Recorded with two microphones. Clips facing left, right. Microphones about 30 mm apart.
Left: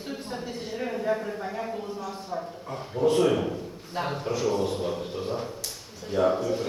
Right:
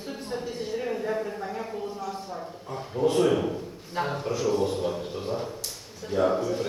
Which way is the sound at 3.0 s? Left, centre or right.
Centre.